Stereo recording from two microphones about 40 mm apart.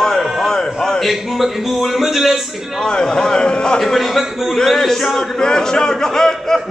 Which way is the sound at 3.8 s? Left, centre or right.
Centre.